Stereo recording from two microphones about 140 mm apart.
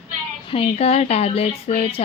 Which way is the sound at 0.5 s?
45° left (ahead or behind).